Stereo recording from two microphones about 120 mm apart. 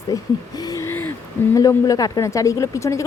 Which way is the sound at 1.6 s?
30° left (ahead or behind).